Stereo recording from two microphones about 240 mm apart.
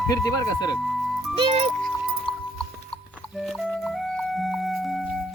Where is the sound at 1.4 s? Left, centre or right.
Right.